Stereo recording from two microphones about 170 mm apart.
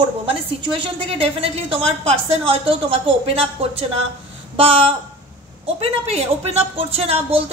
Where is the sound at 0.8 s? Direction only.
35° right (ahead or behind).